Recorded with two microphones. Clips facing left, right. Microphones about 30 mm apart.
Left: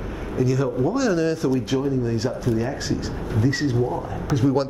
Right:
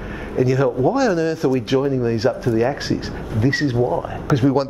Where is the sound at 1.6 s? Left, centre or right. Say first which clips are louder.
Right 4 dB; right.